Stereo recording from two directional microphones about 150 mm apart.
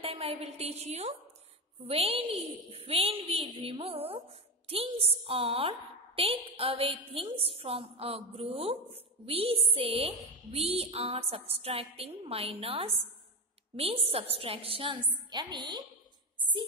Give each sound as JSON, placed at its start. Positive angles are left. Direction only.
{"t": 0.0, "sound": "a woman's voice", "side_deg": -40}